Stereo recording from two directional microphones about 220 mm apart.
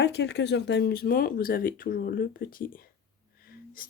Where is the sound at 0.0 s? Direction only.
50° left (ahead or behind).